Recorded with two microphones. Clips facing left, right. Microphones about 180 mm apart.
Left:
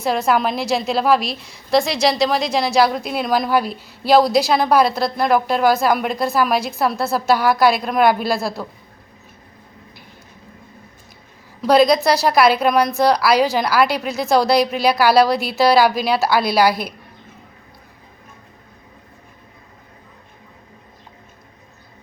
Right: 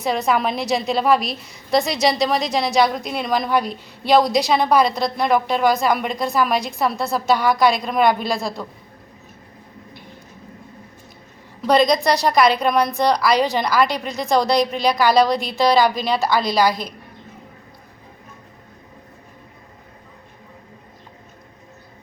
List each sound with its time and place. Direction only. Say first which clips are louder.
0.0 s a woman's voice: left 2 dB; centre (ahead or behind)
11.6 s a woman's voice: left 3 dB; 5° left (ahead or behind)